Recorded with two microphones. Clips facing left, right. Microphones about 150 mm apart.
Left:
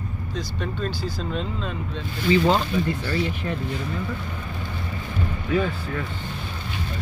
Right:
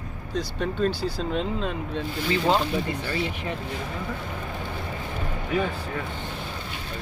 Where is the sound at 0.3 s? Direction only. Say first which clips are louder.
Right 3 dB; 55° right (ahead or behind).